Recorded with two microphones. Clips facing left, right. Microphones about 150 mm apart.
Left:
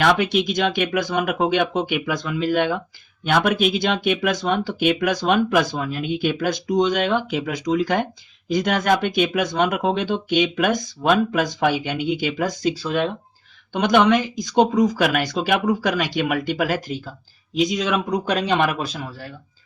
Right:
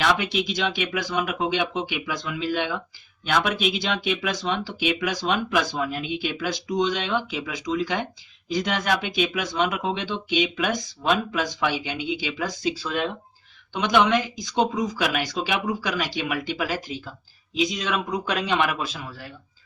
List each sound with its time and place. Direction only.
0.0 s speech: 50° left (ahead or behind)
13.7 s speech: 50° left (ahead or behind)
18.1 s speech: 40° left (ahead or behind)